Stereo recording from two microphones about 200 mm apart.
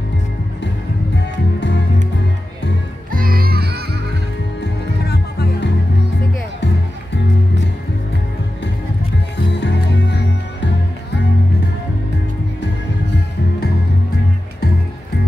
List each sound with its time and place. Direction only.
1.1 s music: 60° left (ahead or behind)
3.1 s music: 45° right (ahead or behind)
4.6 s music: 55° left (ahead or behind)
9.5 s music: 60° left (ahead or behind)